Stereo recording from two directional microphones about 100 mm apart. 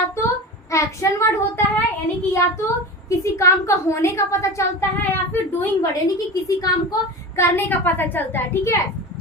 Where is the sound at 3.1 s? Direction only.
30° left (ahead or behind).